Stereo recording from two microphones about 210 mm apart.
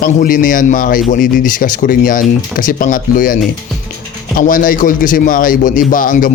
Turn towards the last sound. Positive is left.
turn(degrees=40)  # may be behind; listen again after turning